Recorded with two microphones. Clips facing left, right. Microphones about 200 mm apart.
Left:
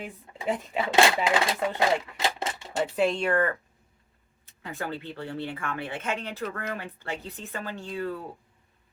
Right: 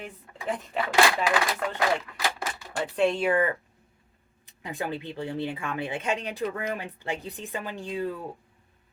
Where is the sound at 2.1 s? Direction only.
25° left (ahead or behind).